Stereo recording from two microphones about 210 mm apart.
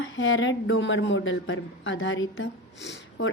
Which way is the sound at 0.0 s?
65° left (ahead or behind).